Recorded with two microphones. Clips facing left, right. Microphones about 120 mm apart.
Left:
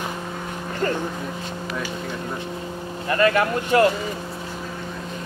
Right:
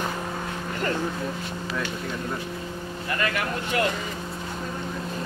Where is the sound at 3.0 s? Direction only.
35° left (ahead or behind).